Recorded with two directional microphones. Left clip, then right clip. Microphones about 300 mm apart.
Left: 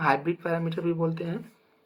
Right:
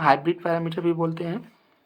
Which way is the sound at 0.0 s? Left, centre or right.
Right.